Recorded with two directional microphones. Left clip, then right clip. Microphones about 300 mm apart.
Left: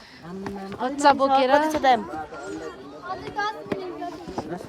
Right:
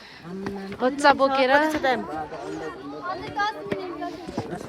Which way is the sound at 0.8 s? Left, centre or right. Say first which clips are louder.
Even; centre.